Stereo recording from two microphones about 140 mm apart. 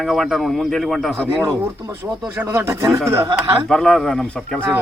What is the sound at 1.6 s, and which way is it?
Speech, 20° right (ahead or behind).